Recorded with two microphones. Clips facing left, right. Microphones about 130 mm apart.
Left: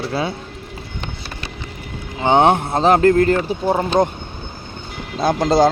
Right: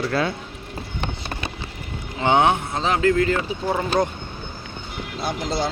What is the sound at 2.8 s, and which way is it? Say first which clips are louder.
Speech: left 8 dB; 50° left (ahead or behind).